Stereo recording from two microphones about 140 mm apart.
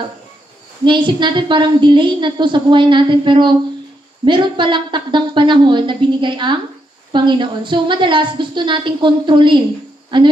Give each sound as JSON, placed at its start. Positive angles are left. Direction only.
{"t": 0.8, "sound": "a woman's voice", "side_deg": -35}